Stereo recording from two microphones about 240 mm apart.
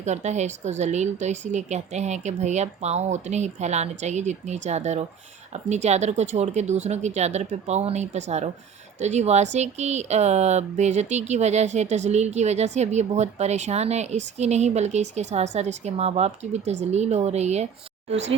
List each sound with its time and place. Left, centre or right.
0.0 s speech: right